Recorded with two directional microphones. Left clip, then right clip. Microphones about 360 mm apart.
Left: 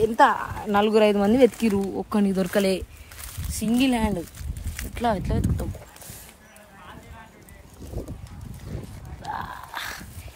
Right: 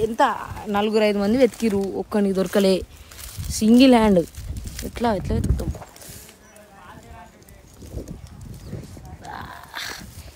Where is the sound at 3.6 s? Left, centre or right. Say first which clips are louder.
Right 9 dB; centre.